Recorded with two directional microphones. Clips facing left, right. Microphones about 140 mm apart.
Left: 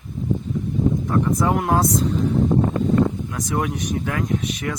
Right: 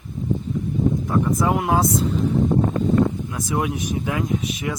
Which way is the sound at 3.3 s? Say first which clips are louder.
Even; 5° right (ahead or behind).